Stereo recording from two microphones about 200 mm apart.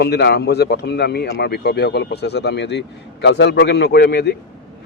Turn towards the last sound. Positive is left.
turn(degrees=55)  # may be behind; listen again after turning